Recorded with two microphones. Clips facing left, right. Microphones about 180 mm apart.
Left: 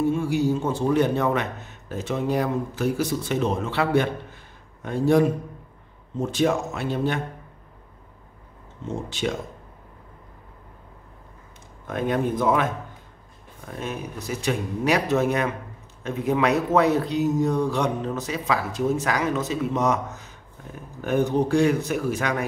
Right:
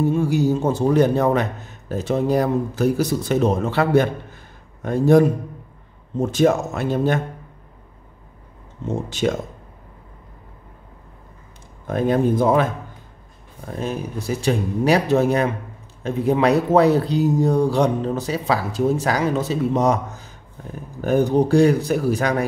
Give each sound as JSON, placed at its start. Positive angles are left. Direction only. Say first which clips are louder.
{"t": 0.0, "sound": "a man's voice", "louder": "right 3 dB", "side_deg": -40}
{"t": 9.2, "sound": "a man's voice", "louder": "right 6 dB", "side_deg": -45}
{"t": 11.9, "sound": "speech", "louder": "right 6 dB", "side_deg": -35}
{"t": 13.7, "sound": "speech", "louder": "right 5 dB", "side_deg": -35}